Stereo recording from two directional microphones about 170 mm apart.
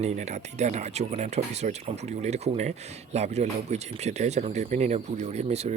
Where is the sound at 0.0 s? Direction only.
40° right (ahead or behind).